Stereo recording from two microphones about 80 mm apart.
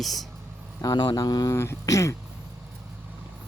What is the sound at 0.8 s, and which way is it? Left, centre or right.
Speech, left.